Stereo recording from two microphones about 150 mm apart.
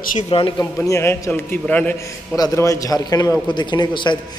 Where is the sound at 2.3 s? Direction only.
25° left (ahead or behind).